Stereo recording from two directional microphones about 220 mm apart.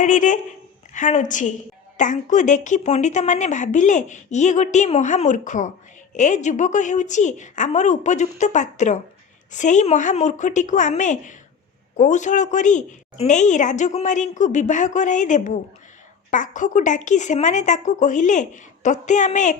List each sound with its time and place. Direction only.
0.0 s a woman's voice: 35° left (ahead or behind)